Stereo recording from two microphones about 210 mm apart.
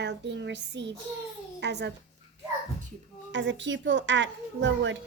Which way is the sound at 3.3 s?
60° right (ahead or behind).